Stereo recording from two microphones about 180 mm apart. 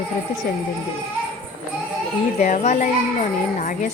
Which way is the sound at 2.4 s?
40° left (ahead or behind).